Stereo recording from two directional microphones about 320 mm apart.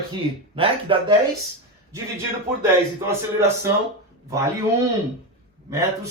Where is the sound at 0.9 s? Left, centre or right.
Centre.